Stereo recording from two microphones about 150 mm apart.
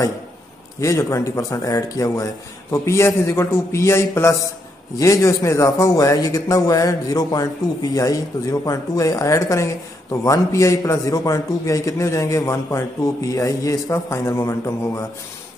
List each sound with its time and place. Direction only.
0.7 s a man's voice: 20° left (ahead or behind)